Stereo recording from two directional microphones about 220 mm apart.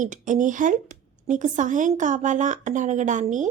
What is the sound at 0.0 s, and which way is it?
A woman's voice, 35° right (ahead or behind).